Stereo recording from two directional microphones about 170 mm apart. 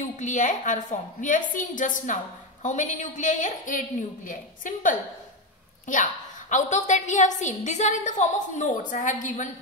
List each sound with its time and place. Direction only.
0.0 s a woman's voice: 45° left (ahead or behind)
6.5 s a woman's voice: 45° left (ahead or behind)